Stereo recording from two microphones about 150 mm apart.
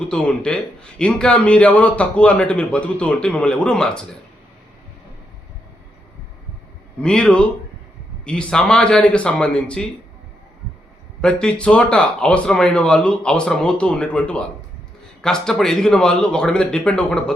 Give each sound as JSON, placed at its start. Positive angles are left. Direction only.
{"t": 0.1, "sound": "a man's voice", "side_deg": 5}
{"t": 7.0, "sound": "a man's voice", "side_deg": 5}
{"t": 11.2, "sound": "a man's voice", "side_deg": 5}